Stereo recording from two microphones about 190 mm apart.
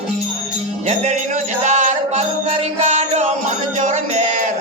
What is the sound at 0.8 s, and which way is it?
Music, 35° right (ahead or behind).